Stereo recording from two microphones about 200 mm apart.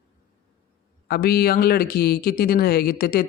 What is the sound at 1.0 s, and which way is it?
A man's voice, 50° left (ahead or behind).